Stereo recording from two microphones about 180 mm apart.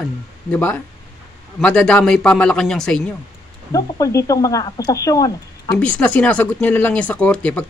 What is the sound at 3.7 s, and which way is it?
Speech, 20° left (ahead or behind).